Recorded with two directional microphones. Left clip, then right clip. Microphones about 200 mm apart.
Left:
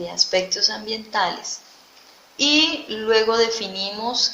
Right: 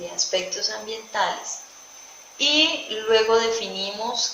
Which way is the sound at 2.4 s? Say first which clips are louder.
Left 1 dB; 45° left (ahead or behind).